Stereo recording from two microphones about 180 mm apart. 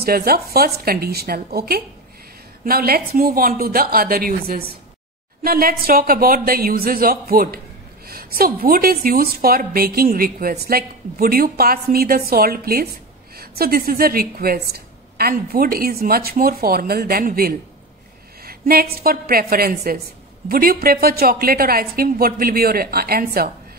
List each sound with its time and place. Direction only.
0.0 s a woman's voice: 55° right (ahead or behind)